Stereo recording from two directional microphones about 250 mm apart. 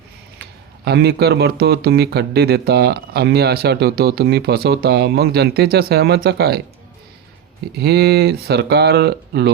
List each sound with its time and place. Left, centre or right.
0.9 s speech: right
7.8 s speech: right